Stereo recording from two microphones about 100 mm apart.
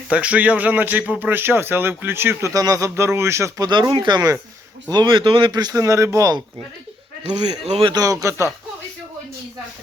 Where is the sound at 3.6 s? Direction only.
45° right (ahead or behind).